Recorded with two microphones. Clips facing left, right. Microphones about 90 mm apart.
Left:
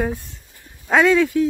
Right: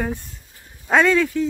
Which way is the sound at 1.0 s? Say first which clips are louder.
Left 3 dB; 15° left (ahead or behind).